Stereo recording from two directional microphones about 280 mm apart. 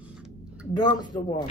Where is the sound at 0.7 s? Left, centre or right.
Centre.